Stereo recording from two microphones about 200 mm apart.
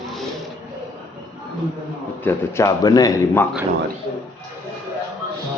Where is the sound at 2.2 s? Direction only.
15° left (ahead or behind).